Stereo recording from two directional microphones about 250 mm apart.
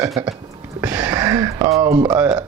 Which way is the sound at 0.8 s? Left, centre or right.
Centre.